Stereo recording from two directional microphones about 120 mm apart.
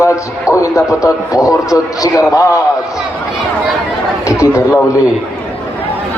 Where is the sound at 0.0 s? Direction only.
25° left (ahead or behind).